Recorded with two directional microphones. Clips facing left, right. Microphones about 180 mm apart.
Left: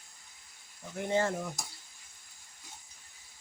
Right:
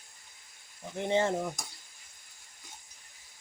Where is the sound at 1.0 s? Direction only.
20° right (ahead or behind).